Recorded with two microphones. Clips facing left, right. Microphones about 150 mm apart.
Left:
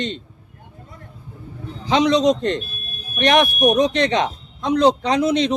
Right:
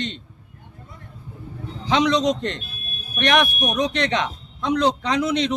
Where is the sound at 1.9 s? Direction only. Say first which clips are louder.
Left 3 dB; 30° left (ahead or behind).